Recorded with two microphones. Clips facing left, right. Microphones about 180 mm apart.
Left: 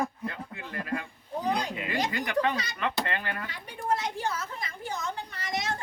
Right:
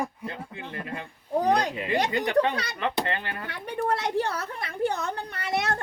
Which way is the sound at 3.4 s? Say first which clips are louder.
Right 5 dB; 65° right (ahead or behind).